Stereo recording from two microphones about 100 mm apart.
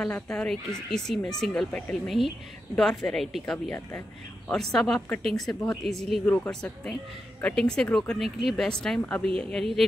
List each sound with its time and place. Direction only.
0.0 s speech: 5° left (ahead or behind)
1.7 s speech: 15° left (ahead or behind)
2.0 s speech: centre (ahead or behind)
6.2 s speech: 15° left (ahead or behind)